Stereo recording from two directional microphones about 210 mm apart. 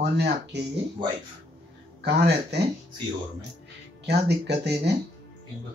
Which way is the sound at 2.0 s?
55° right (ahead or behind).